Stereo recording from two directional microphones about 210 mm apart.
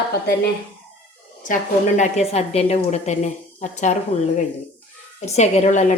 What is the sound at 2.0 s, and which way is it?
A woman's voice, 30° left (ahead or behind).